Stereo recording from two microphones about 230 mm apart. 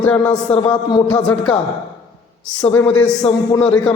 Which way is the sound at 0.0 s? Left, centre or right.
Centre.